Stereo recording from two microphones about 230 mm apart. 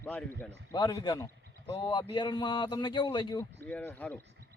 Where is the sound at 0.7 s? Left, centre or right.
Centre.